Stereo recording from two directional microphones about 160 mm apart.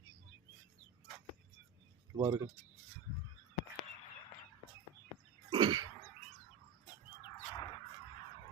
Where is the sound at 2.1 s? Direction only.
20° right (ahead or behind).